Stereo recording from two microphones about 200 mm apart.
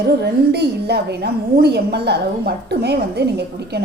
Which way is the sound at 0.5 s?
55° right (ahead or behind).